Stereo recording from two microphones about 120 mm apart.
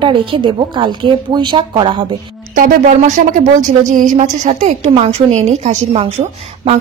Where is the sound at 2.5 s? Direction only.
90° right.